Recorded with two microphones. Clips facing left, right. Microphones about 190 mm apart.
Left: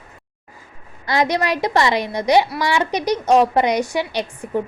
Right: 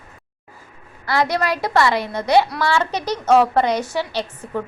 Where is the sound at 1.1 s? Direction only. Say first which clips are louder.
Left 1 dB; 20° left (ahead or behind).